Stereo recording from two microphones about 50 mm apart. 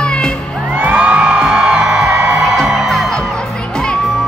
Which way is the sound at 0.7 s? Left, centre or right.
Right.